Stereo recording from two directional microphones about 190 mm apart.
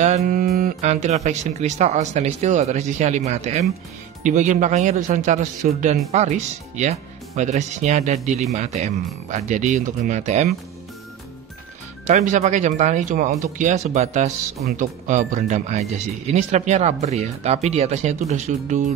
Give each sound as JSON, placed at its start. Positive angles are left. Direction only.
{"t": 0.0, "sound": "speech", "side_deg": -40}
{"t": 12.1, "sound": "speech", "side_deg": -40}